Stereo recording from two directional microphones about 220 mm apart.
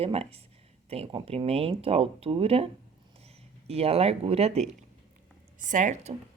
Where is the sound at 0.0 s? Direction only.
25° right (ahead or behind).